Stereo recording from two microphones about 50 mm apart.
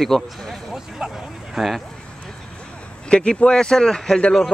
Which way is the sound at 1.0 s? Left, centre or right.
Centre.